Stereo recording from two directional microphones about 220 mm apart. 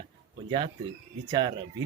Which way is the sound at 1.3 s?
20° right (ahead or behind).